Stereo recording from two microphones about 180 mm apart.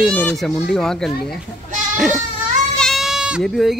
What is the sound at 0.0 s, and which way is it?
Speech, 10° left (ahead or behind).